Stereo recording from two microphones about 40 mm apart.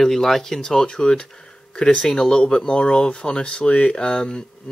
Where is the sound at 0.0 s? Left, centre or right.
Centre.